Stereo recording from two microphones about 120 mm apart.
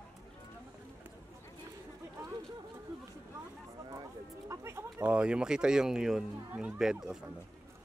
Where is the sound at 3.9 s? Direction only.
30° right (ahead or behind); by 6.3 s 5° right (ahead or behind).